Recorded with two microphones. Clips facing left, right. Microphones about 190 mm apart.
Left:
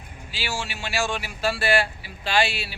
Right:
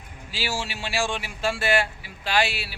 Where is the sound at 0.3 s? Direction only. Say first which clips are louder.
Right 1 dB; 40° right (ahead or behind).